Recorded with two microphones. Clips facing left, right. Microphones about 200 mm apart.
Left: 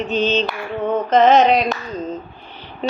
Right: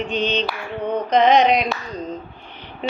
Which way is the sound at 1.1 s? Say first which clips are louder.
Left 2 dB; 45° left (ahead or behind).